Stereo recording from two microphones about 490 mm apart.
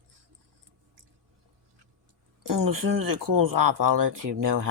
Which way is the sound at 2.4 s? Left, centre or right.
Right.